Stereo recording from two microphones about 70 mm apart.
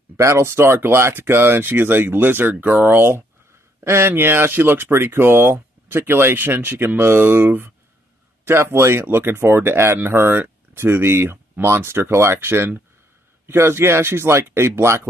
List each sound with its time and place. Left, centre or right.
0.2 s speech: right